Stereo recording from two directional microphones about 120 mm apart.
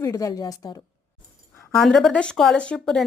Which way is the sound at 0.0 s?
30° left (ahead or behind).